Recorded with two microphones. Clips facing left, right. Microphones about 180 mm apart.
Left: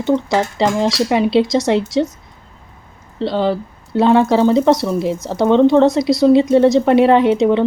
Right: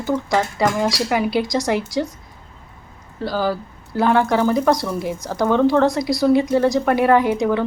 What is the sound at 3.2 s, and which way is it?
Speech, 25° left (ahead or behind).